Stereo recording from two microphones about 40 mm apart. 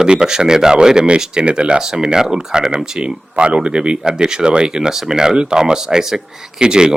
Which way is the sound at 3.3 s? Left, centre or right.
Right.